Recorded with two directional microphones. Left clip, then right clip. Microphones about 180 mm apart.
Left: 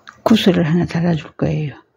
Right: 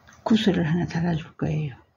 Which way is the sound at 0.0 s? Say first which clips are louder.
Left 9 dB; 60° left (ahead or behind).